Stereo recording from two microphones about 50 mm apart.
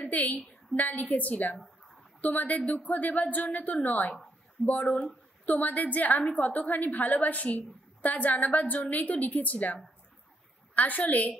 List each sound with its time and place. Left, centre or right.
0.0 s a woman's voice: left